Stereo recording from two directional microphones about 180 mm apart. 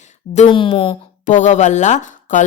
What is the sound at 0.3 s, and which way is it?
Speech, 30° left (ahead or behind).